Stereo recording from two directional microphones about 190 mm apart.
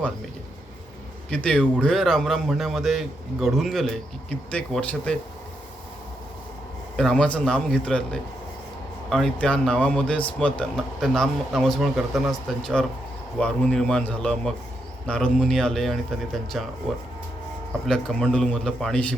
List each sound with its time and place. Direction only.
1.3 s speech: 5° left (ahead or behind)
6.9 s speech: 5° left (ahead or behind)
17.8 s speech: 5° left (ahead or behind)